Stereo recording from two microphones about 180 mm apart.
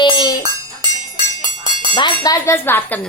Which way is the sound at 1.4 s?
25° right (ahead or behind).